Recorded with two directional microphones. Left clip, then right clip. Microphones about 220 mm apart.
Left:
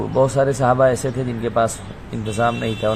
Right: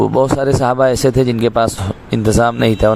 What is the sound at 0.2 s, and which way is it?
A man's voice, 45° right (ahead or behind).